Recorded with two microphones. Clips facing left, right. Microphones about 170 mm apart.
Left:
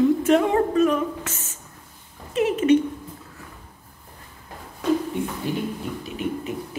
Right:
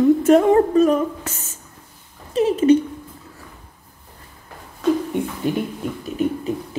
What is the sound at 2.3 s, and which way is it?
Speech, 35° right (ahead or behind).